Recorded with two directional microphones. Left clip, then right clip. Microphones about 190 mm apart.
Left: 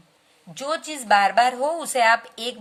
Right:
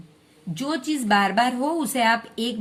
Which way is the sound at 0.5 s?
15° left (ahead or behind).